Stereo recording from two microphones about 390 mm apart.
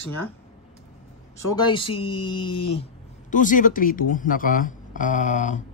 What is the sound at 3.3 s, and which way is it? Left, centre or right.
Speech, centre.